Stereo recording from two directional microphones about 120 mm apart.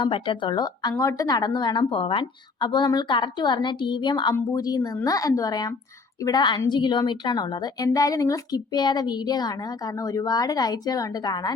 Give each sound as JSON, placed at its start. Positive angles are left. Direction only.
{"t": 0.0, "sound": "a woman's voice", "side_deg": 45}